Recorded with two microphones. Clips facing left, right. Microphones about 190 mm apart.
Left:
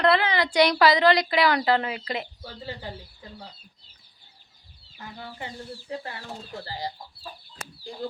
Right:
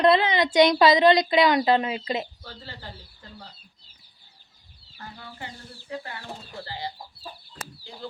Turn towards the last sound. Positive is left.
turn(degrees=40)  # may be behind; listen again after turning